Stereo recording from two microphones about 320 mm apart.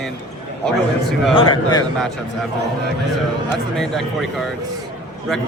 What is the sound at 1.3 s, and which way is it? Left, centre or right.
Speech, centre.